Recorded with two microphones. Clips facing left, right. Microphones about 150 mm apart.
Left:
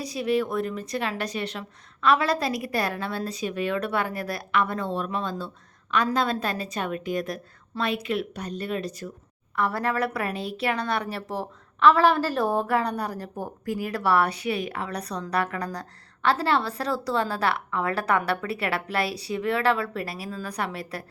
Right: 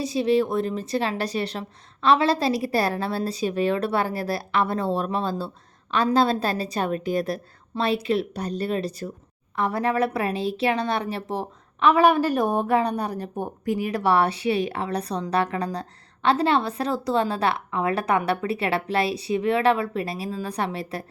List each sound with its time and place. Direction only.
0.0 s a woman's voice: 25° right (ahead or behind)
9.6 s a woman's voice: 20° right (ahead or behind)